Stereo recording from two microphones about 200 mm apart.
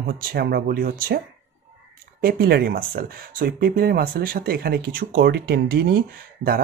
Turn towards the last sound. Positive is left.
turn(degrees=-50)  # may be behind; listen again after turning